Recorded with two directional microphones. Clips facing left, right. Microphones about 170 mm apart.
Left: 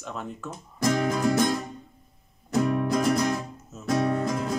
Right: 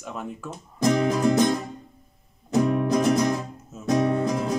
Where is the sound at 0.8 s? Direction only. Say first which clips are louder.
Right 3 dB; 20° right (ahead or behind).